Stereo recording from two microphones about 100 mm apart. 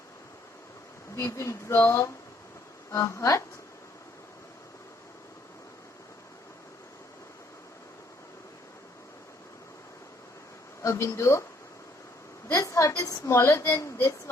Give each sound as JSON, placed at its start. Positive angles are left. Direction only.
{"t": 1.1, "sound": "a woman's voice", "side_deg": 30}
{"t": 10.8, "sound": "a woman's voice", "side_deg": 30}
{"t": 12.5, "sound": "a woman's voice", "side_deg": 30}